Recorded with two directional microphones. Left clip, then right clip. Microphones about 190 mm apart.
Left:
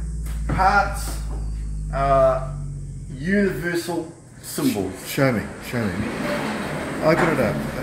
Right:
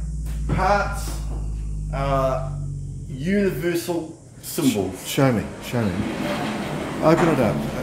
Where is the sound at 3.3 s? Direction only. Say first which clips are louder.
Even; 20° right (ahead or behind).